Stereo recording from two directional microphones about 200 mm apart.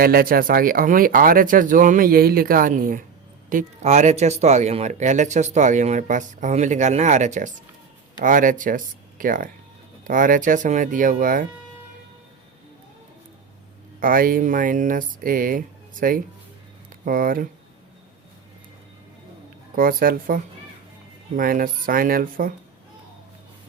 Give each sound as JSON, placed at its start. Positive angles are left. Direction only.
{"t": 0.0, "sound": "speech", "side_deg": -45}
{"t": 14.0, "sound": "speech", "side_deg": -45}
{"t": 19.7, "sound": "speech", "side_deg": -45}